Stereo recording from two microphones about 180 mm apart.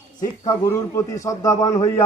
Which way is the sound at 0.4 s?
15° left (ahead or behind).